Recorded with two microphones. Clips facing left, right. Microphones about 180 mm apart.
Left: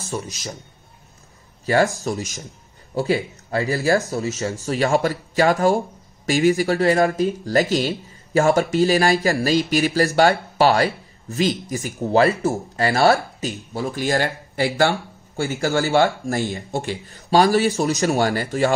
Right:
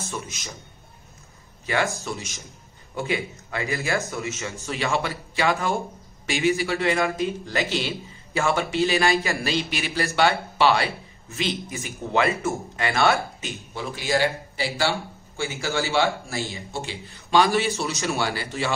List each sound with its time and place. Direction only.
0.0 s a man's voice: 40° left (ahead or behind)
2.0 s speech: 40° left (ahead or behind)